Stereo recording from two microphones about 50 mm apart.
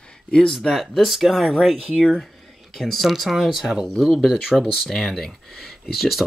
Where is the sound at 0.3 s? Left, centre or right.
Centre.